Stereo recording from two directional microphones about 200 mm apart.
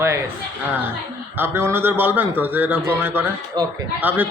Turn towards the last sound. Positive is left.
turn(degrees=-10)  # may be behind; listen again after turning